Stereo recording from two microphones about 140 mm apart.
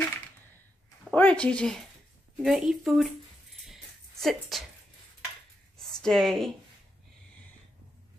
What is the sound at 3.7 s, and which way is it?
Music, centre (ahead or behind).